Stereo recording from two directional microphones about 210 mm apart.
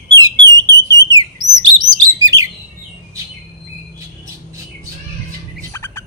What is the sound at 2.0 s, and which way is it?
Bird, 15° right (ahead or behind).